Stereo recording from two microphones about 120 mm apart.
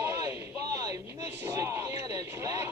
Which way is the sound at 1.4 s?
25° right (ahead or behind).